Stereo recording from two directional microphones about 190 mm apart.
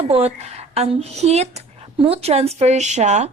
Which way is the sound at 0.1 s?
30° right (ahead or behind).